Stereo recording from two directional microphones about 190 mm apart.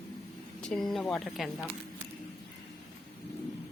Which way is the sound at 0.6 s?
5° left (ahead or behind).